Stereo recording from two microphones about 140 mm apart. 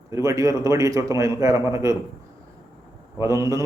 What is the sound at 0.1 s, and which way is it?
A man's voice, 25° right (ahead or behind).